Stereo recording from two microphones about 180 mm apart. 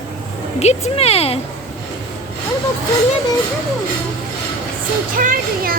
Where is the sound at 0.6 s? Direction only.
35° left (ahead or behind).